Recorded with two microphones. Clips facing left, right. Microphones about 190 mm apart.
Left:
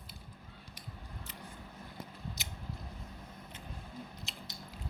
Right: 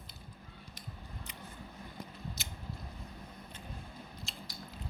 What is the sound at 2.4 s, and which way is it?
Biting, 15° left (ahead or behind).